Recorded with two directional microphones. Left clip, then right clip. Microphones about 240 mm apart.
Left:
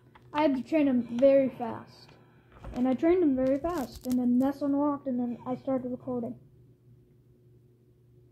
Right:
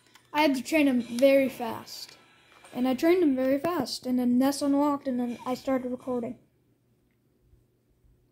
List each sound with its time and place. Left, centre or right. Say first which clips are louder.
0.3 s a woman's voice: right 2 dB; right